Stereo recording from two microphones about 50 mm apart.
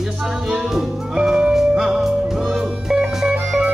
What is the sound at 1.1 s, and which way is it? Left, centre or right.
Music, centre.